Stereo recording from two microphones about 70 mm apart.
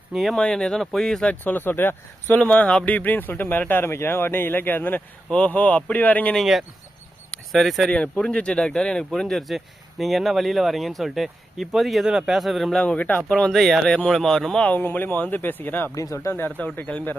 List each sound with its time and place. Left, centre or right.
0.3 s speech: centre
1.2 s speech: left
2.4 s speech: centre
6.3 s speech: centre
7.9 s speech: centre
12.8 s speech: centre
13.5 s speech: centre
14.7 s speech: left
16.0 s speech: left
16.3 s speech: left